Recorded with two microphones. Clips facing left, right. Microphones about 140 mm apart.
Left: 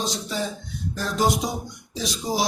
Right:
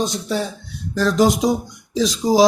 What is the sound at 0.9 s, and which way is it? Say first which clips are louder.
Speech: right 7 dB; 90° right.